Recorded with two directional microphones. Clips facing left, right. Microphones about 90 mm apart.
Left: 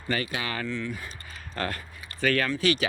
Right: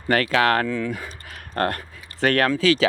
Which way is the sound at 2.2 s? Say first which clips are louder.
Right 6 dB; 70° right (ahead or behind).